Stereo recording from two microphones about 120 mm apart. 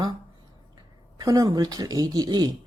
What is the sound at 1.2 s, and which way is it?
Speech, 30° right (ahead or behind).